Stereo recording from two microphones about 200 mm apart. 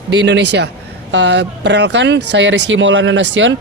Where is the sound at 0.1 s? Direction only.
65° right (ahead or behind).